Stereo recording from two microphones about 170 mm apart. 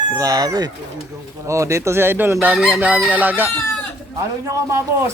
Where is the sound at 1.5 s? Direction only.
15° right (ahead or behind).